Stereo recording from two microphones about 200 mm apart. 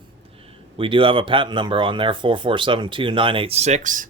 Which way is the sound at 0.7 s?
25° right (ahead or behind).